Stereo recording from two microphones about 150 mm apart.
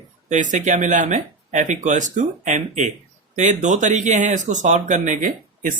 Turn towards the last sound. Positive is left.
turn(degrees=-60)  # may be behind; listen again after turning